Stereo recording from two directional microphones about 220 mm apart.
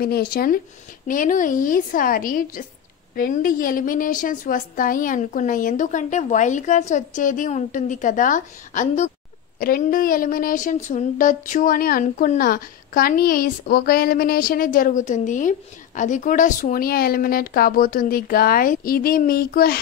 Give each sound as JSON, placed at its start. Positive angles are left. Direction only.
{"t": 0.0, "sound": "speech", "side_deg": 45}